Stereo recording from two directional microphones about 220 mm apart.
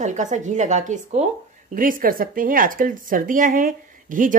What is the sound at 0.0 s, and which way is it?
Speech, 35° right (ahead or behind).